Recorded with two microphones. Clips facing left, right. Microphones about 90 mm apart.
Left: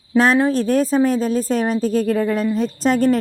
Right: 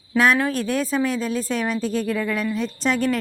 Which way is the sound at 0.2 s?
30° left (ahead or behind).